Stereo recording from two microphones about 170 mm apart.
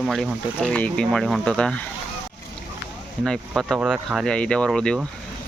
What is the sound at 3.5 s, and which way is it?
Speech, 5° right (ahead or behind).